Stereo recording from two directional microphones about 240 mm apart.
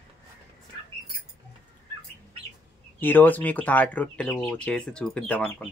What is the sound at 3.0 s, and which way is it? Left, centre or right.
Speech, centre.